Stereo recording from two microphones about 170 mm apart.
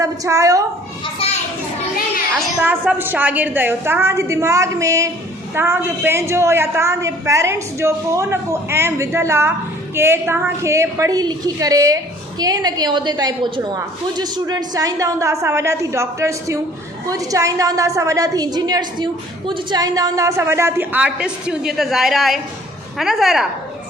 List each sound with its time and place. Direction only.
0.0 s a woman's voice: 20° right (ahead or behind)
1.0 s children playing: 35° left (ahead or behind)
2.6 s a woman's voice: 10° right (ahead or behind)